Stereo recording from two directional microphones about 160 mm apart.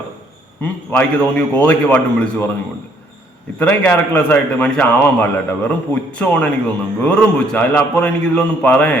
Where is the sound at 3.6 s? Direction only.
10° left (ahead or behind).